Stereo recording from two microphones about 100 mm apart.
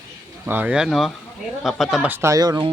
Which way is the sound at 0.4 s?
15° right (ahead or behind).